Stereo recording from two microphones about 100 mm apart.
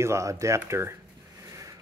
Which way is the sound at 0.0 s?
30° right (ahead or behind).